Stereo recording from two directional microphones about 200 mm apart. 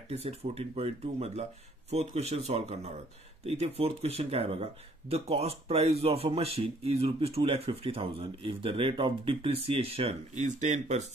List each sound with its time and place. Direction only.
0.1 s speech: 30° right (ahead or behind)